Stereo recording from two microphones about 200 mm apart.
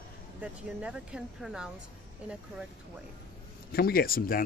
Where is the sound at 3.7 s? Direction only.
50° left (ahead or behind).